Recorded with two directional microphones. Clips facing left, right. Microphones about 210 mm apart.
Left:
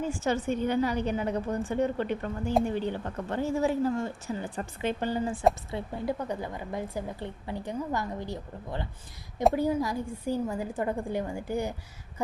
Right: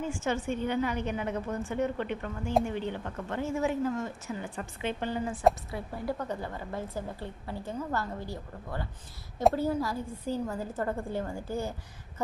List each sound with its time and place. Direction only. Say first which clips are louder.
0.0 s a woman's voice: left 3 dB; 35° left (ahead or behind)
6.1 s a woman's voice: left 2 dB; 15° left (ahead or behind)